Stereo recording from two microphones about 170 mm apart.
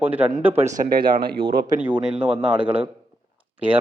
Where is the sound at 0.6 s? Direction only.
45° right (ahead or behind); by 1.4 s 60° right (ahead or behind).